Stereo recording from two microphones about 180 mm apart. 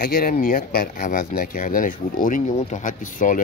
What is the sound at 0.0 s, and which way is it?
Speech, 55° left (ahead or behind).